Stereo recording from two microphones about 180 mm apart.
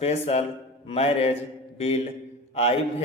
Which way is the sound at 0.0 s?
35° left (ahead or behind).